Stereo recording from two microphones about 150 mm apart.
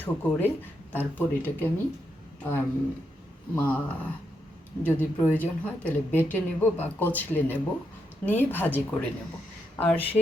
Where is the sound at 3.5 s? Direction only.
10° left (ahead or behind).